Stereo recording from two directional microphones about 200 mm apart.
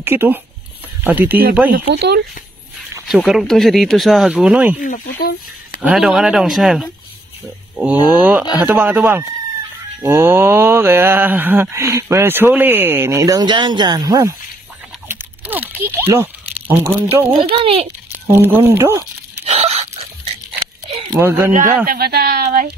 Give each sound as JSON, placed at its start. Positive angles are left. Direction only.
{"t": 0.0, "sound": "mantra", "side_deg": -10}
{"t": 1.7, "sound": "speech", "side_deg": -55}
{"t": 3.1, "sound": "speech", "side_deg": 0}
{"t": 4.7, "sound": "speech", "side_deg": 45}
{"t": 5.8, "sound": "speech", "side_deg": -5}
{"t": 7.7, "sound": "mantra", "side_deg": -10}
{"t": 15.0, "sound": "a sound", "side_deg": -10}
{"t": 17.4, "sound": "speech", "side_deg": -30}
{"t": 18.2, "sound": "mantra", "side_deg": -10}
{"t": 19.4, "sound": "a sound", "side_deg": -35}
{"t": 21.2, "sound": "mantra", "side_deg": -15}
{"t": 21.8, "sound": "speech", "side_deg": -50}